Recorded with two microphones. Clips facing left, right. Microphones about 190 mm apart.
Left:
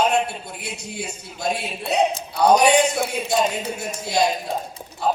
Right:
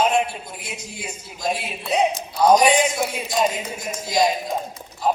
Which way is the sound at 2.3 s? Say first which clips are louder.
Even; 65° left (ahead or behind).